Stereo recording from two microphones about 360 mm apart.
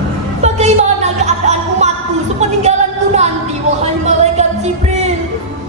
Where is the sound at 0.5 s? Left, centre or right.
Centre.